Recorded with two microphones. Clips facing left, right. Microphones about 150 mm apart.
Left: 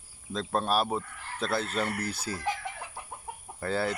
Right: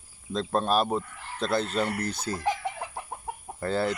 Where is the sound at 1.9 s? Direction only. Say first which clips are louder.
Right 3 dB; 10° left (ahead or behind).